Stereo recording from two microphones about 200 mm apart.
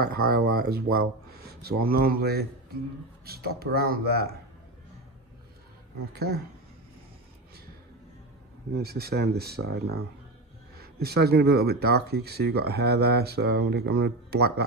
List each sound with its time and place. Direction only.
0.0 s speech: 55° right (ahead or behind)
6.1 s speech: 55° right (ahead or behind)
8.7 s speech: 50° right (ahead or behind)